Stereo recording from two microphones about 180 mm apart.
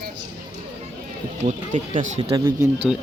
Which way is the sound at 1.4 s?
30° right (ahead or behind).